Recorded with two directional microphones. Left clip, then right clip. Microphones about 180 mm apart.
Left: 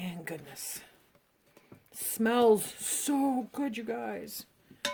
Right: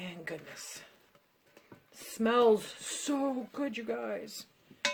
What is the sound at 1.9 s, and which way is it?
Speech, 60° left (ahead or behind).